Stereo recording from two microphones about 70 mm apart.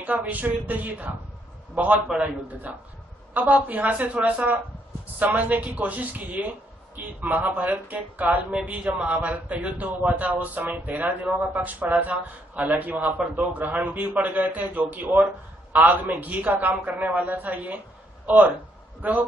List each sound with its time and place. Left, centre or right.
0.0 s a man's voice: right
2.2 s a man's voice: right